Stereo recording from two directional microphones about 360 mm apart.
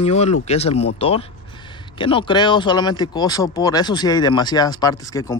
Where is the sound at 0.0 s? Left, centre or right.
Centre.